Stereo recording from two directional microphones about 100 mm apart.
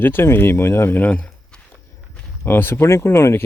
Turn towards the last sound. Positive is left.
turn(degrees=25)  # may be behind; listen again after turning